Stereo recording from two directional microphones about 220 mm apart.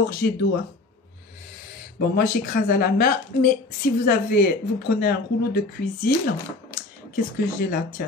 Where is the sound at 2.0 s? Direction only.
40° left (ahead or behind).